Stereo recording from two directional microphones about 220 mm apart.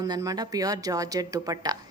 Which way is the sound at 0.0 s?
15° right (ahead or behind).